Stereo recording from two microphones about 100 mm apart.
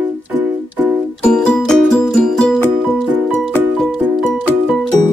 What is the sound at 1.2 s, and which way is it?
Music, 5° left (ahead or behind).